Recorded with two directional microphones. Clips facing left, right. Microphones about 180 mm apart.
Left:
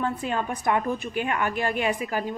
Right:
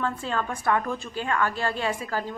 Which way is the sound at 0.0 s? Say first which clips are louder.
Left 1 dB; 15° left (ahead or behind).